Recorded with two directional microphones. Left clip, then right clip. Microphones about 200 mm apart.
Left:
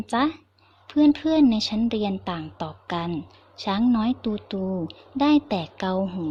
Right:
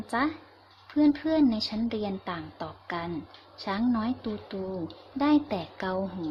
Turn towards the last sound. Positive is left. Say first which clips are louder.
# left 5 dB
turn(degrees=40)  # may be behind; listen again after turning